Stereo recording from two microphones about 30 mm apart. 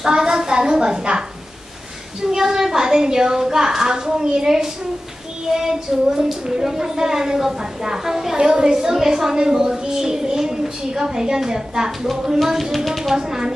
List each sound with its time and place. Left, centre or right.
0.0 s a sound: right
2.3 s a woman's voice: centre
8.4 s a woman's voice: right
12.7 s speech: centre
13.1 s a woman's voice: right